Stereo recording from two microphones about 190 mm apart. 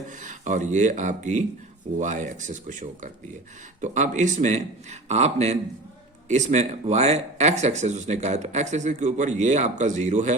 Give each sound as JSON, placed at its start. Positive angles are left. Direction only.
{"t": 0.2, "sound": "speech", "side_deg": -40}